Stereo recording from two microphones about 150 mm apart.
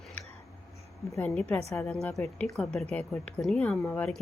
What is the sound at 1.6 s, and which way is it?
Speech, 20° left (ahead or behind).